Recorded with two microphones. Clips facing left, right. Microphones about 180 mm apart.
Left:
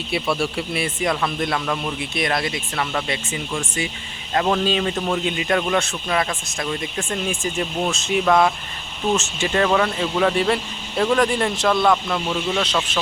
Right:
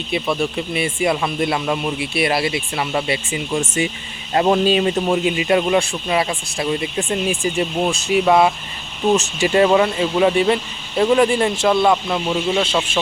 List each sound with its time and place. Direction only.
0.5 s speech: centre (ahead or behind)
0.9 s speech: 10° right (ahead or behind)
2.0 s speech: 5° right (ahead or behind)
3.1 s speech: 15° right (ahead or behind)
11.5 s speech: 25° right (ahead or behind)
12.6 s speech: 25° right (ahead or behind)